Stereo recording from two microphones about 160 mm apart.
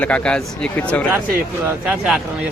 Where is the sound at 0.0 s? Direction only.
5° left (ahead or behind).